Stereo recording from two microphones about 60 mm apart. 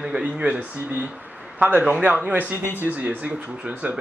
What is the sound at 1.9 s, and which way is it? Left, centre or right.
Speech, right.